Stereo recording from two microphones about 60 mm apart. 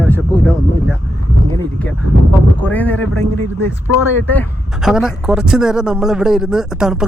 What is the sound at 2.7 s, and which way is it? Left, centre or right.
Speech, left.